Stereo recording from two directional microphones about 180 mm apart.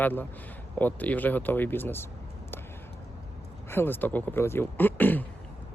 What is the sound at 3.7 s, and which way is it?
Speech, 10° left (ahead or behind).